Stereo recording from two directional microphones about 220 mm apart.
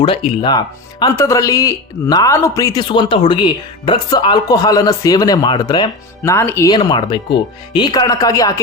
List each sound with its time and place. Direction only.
0.0 s speech: 20° left (ahead or behind)